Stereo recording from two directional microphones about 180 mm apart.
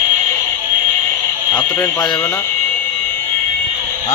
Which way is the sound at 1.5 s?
5° left (ahead or behind).